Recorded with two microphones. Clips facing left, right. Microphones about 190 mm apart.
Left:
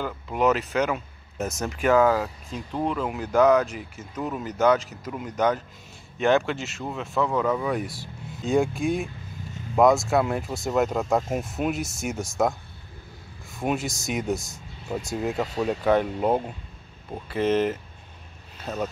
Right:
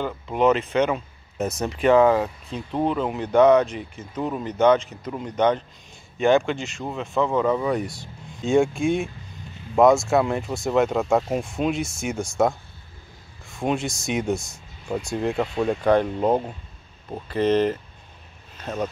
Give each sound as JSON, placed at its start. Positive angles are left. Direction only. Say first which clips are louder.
{"t": 0.0, "sound": "speech", "louder": "right 3 dB", "side_deg": 0}
{"t": 2.5, "sound": "speech", "louder": "right 3 dB", "side_deg": -30}
{"t": 3.2, "sound": "speech", "louder": "right 3 dB", "side_deg": 0}